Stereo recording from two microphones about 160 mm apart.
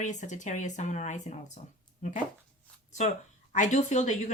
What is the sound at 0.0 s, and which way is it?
Speech, 50° left (ahead or behind).